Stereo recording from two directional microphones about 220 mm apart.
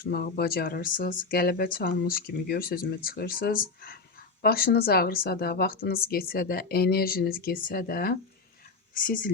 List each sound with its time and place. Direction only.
0.0 s speech: 45° left (ahead or behind)